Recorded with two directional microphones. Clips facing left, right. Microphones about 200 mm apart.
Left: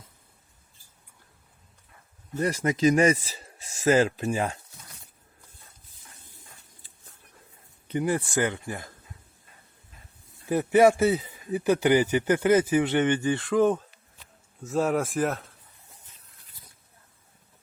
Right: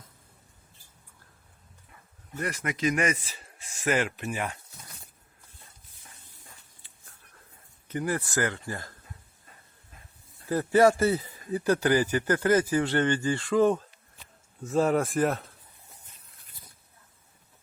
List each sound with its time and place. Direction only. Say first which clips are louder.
2.3 s speech: left 7 dB; 35° left (ahead or behind)
7.9 s speech: left 4 dB; 20° left (ahead or behind)
10.5 s speech: left 2 dB; 20° left (ahead or behind)
13.5 s speech: even; centre (ahead or behind)